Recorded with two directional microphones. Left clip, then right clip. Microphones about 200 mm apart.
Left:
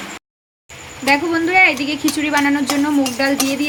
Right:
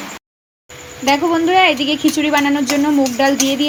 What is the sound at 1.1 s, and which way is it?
A woman's voice, 10° right (ahead or behind).